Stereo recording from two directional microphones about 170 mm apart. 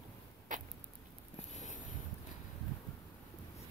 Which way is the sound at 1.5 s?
45° left (ahead or behind).